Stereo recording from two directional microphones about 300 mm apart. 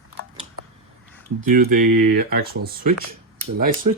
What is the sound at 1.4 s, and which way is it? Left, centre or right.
Speech, right.